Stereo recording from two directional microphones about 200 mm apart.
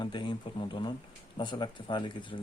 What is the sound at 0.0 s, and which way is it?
Speech, 20° left (ahead or behind).